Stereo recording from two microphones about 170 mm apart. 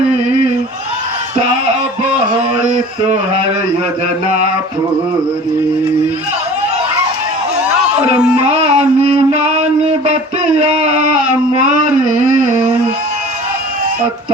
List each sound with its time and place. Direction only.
8.6 s music: 40° right (ahead or behind)